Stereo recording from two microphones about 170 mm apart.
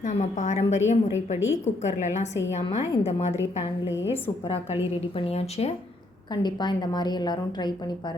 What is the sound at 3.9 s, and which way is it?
Speech, 90° left.